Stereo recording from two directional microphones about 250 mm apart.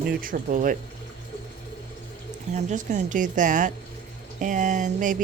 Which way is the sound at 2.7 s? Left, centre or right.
Right.